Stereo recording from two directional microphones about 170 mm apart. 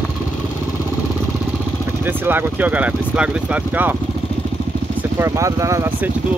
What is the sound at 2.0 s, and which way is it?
Speech, 10° right (ahead or behind).